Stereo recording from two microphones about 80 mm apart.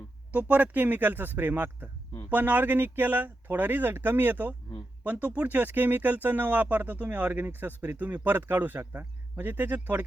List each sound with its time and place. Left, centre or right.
0.3 s speech: centre